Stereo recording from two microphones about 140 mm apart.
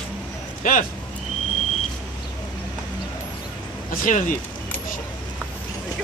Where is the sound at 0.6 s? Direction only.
70° left (ahead or behind).